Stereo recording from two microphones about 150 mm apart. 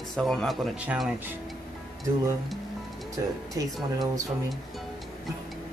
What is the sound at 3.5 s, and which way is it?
Speech, 25° right (ahead or behind).